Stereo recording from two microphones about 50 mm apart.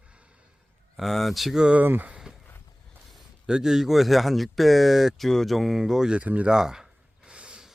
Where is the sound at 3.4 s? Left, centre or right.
Centre.